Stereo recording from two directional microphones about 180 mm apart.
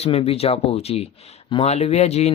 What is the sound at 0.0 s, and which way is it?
Speech, 35° left (ahead or behind).